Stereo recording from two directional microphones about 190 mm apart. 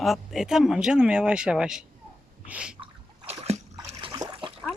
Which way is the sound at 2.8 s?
35° right (ahead or behind).